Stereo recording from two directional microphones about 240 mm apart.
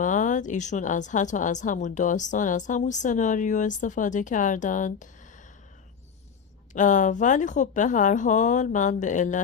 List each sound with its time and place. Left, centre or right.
0.0 s a woman's voice: left
6.7 s a woman's voice: left